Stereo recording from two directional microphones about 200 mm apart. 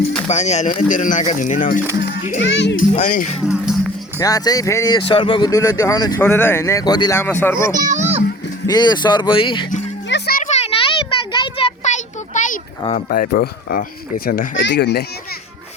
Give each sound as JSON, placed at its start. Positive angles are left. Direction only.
{"t": 0.3, "sound": "speech", "side_deg": 35}
{"t": 2.4, "sound": "speech", "side_deg": 60}
{"t": 2.9, "sound": "speech", "side_deg": 40}
{"t": 3.4, "sound": "speech", "side_deg": -5}
{"t": 4.2, "sound": "speech", "side_deg": 20}
{"t": 7.9, "sound": "a sound", "side_deg": -35}
{"t": 8.6, "sound": "speech", "side_deg": 20}
{"t": 10.1, "sound": "music", "side_deg": 55}
{"t": 11.3, "sound": "a sound", "side_deg": 25}
{"t": 13.1, "sound": "speech", "side_deg": 45}